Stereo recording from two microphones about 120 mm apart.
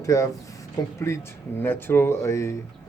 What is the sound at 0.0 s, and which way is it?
Speech, 25° left (ahead or behind).